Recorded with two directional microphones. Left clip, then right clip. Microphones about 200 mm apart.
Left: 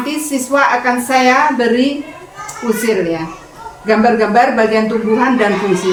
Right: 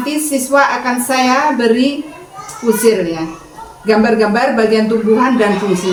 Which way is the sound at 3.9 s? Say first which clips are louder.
Even; 15° left (ahead or behind).